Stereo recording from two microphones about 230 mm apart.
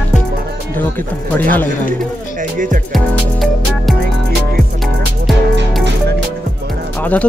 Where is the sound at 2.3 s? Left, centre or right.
Right.